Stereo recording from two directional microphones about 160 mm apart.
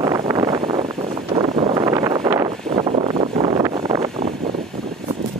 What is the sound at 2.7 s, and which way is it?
Vehicle, 35° right (ahead or behind).